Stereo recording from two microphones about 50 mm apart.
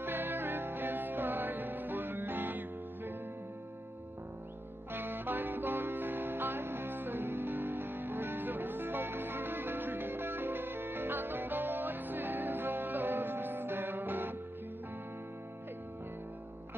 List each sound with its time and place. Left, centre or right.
0.0 s music: right
4.9 s music: right